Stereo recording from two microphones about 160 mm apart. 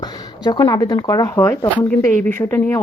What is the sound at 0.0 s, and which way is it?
Speech, 25° left (ahead or behind).